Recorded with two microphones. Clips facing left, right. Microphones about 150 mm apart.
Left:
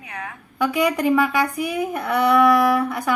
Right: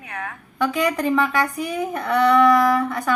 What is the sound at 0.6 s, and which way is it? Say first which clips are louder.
Speech: left 1 dB; 10° left (ahead or behind).